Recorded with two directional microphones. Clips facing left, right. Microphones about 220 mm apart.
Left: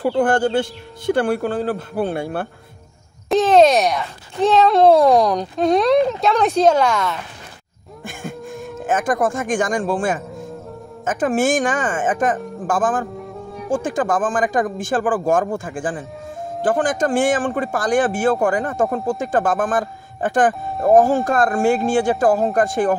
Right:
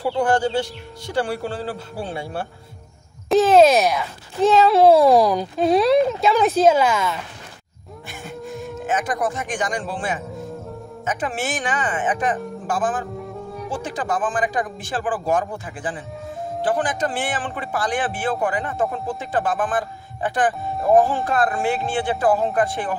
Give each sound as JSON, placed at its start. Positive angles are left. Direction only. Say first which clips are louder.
{"t": 0.0, "sound": "a man's voice", "louder": "left 3 dB", "side_deg": 50}
{"t": 3.3, "sound": "speech", "louder": "even", "side_deg": 0}
{"t": 8.1, "sound": "a sound", "louder": "left 4 dB", "side_deg": 50}
{"t": 8.5, "sound": "music", "louder": "even", "side_deg": 0}
{"t": 8.8, "sound": "a man's voice", "louder": "left 5 dB", "side_deg": 50}
{"t": 13.2, "sound": "music", "louder": "even", "side_deg": 0}
{"t": 13.7, "sound": "a man's voice", "louder": "left 7 dB", "side_deg": 50}